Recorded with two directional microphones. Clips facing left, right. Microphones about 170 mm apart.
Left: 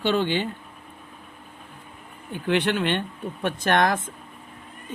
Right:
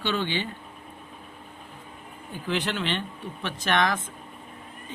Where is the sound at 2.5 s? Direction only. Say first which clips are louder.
Left 6 dB; 60° left (ahead or behind).